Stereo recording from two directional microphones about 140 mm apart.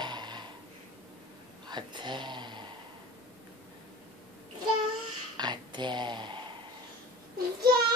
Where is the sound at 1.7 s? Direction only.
35° right (ahead or behind).